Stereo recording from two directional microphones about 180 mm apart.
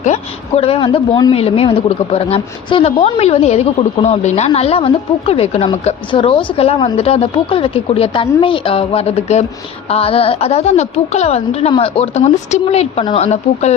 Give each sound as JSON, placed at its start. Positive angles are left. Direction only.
{"t": 0.0, "sound": "a woman's voice", "side_deg": 35}